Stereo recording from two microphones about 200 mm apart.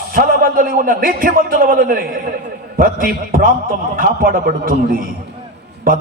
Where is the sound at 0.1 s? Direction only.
45° right (ahead or behind).